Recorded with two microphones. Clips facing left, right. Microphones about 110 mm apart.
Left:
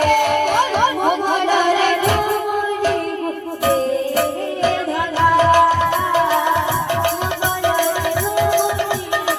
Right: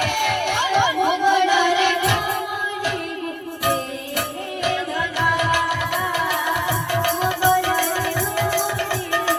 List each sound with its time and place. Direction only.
0.0 s crowd: 40° left (ahead or behind)
5.2 s music: 35° left (ahead or behind)